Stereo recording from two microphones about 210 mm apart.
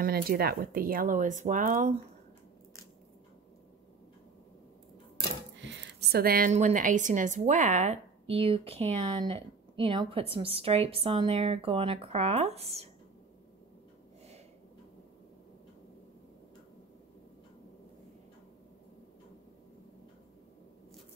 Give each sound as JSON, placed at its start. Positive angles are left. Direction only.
{"t": 0.0, "sound": "speech", "side_deg": -45}
{"t": 5.6, "sound": "a woman's voice", "side_deg": -55}